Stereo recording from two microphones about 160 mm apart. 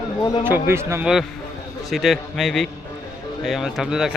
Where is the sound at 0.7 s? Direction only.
15° right (ahead or behind).